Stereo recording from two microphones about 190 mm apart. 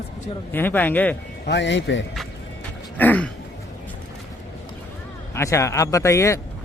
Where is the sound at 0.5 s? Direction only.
10° left (ahead or behind).